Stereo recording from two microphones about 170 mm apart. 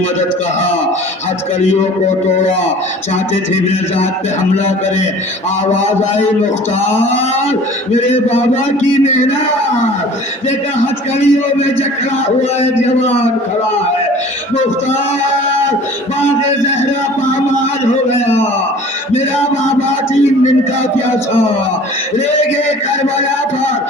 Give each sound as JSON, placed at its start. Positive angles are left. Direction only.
{"t": 7.9, "sound": "a man's voice", "side_deg": 40}
{"t": 11.2, "sound": "a man's voice", "side_deg": 40}